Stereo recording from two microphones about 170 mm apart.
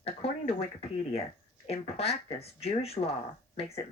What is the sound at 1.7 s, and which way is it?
Speech, 35° left (ahead or behind).